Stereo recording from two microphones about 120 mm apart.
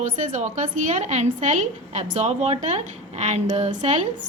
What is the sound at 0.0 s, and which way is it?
Speech, 90° right.